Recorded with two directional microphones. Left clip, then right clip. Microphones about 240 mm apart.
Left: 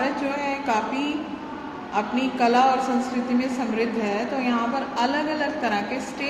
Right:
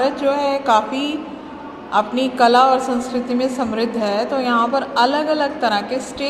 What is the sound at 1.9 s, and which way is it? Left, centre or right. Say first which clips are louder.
Speech: right 7 dB; right.